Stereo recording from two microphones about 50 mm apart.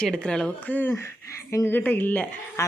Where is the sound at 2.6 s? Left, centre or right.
Left.